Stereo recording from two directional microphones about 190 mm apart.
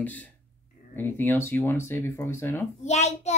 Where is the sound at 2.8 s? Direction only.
35° left (ahead or behind).